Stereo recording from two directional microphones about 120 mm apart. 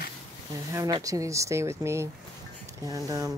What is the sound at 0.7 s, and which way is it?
Speech, 30° right (ahead or behind).